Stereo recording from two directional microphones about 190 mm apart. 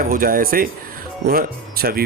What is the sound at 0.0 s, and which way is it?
A man's voice, 45° right (ahead or behind).